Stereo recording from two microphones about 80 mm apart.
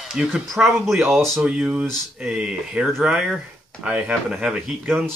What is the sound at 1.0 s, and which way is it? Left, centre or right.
Speech, right.